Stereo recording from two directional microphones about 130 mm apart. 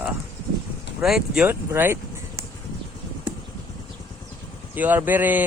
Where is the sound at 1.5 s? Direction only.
20° right (ahead or behind).